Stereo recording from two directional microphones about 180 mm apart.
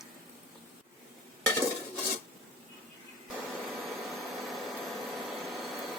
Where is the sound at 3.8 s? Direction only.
Centre (ahead or behind).